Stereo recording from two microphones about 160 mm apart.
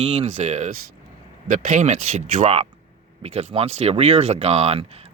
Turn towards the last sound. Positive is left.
turn(degrees=-40)  # may be behind; listen again after turning